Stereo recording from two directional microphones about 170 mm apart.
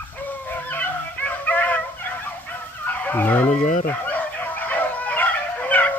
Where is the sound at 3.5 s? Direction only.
45° left (ahead or behind).